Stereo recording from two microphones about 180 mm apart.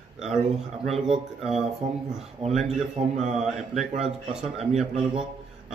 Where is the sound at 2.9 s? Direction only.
35° right (ahead or behind).